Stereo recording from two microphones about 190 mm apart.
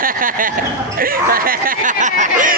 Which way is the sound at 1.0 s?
50° right (ahead or behind).